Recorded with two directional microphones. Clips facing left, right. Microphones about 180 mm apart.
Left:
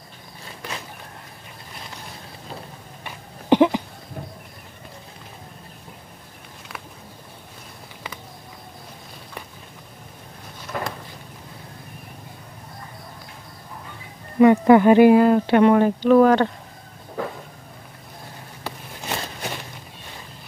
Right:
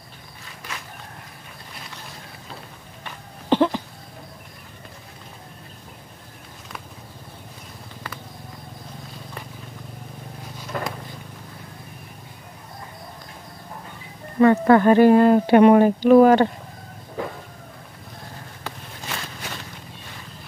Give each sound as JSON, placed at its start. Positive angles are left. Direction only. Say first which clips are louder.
{"t": 3.4, "sound": "a sound", "louder": "left 3 dB", "side_deg": 15}
{"t": 14.4, "sound": "speech", "louder": "left 2 dB", "side_deg": 15}
{"t": 15.2, "sound": "speech", "louder": "right 2 dB", "side_deg": -10}